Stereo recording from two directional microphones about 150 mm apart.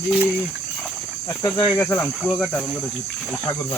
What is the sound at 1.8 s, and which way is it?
Speech, 15° left (ahead or behind).